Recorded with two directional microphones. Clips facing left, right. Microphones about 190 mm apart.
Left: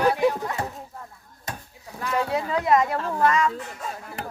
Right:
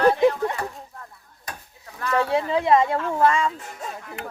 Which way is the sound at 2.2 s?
25° right (ahead or behind).